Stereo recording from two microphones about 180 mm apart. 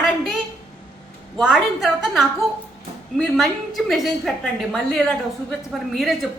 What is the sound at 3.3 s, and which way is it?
A woman's voice, centre (ahead or behind).